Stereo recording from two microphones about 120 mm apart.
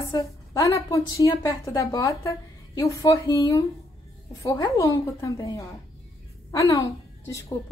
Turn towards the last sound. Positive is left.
turn(degrees=25)  # may be behind; listen again after turning